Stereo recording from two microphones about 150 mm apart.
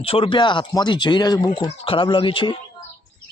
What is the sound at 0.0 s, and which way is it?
Speech, 40° left (ahead or behind).